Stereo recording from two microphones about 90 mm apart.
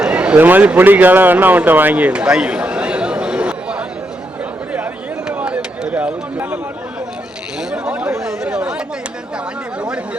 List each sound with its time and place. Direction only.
0.0 s a man's voice: 10° right (ahead or behind)
5.3 s a sound: 15° right (ahead or behind)
7.7 s chatter: 10° right (ahead or behind)